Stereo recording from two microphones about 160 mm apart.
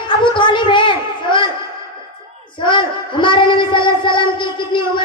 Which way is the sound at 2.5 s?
30° left (ahead or behind).